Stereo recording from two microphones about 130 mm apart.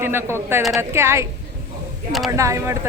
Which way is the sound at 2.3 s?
25° right (ahead or behind).